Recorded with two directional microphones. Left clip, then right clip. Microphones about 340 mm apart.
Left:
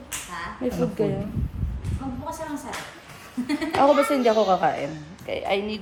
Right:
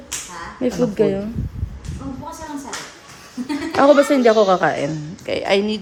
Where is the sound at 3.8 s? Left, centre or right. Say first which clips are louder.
Right 6 dB; right.